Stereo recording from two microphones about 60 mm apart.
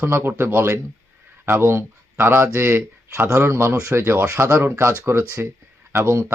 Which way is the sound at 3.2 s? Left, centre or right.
Right.